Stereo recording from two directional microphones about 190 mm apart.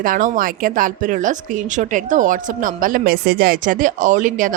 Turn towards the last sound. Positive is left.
turn(degrees=-45)  # may be behind; listen again after turning